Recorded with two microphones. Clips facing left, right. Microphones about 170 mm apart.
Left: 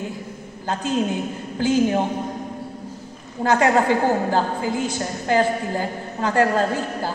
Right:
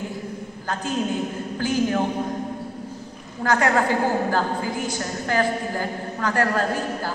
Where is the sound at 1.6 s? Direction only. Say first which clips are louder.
Left 4 dB; 20° left (ahead or behind).